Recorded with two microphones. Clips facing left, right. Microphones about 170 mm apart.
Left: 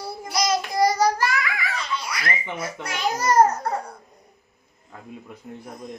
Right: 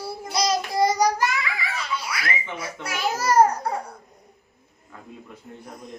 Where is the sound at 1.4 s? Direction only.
30° right (ahead or behind).